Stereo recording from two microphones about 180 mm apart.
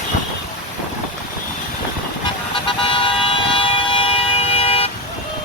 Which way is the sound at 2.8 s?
30° left (ahead or behind).